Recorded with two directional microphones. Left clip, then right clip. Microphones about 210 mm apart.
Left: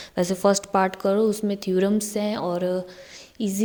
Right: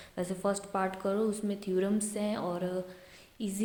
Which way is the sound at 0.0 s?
40° left (ahead or behind).